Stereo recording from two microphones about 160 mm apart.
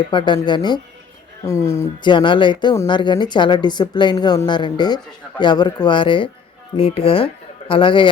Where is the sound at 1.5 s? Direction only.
20° left (ahead or behind).